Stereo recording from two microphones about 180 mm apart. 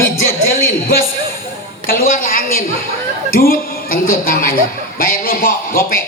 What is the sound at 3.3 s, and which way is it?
A woman's voice, 55° left (ahead or behind).